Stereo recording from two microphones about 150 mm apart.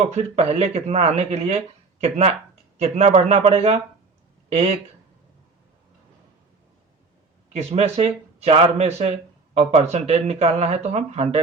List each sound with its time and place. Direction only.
0.1 s speech: 45° right (ahead or behind)
7.5 s speech: 45° right (ahead or behind)